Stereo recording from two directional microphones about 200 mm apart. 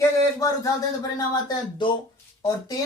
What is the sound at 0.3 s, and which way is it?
Speech, 15° left (ahead or behind).